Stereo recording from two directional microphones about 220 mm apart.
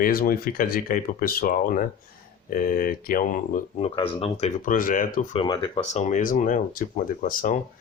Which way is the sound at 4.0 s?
25° left (ahead or behind).